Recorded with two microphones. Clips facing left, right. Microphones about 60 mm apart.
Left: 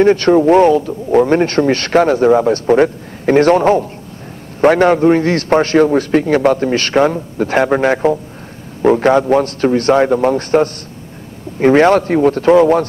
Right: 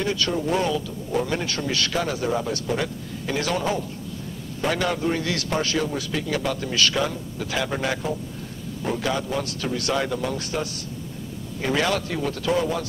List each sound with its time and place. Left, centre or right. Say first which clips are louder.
0.0 s a man's voice: left 15 dB; left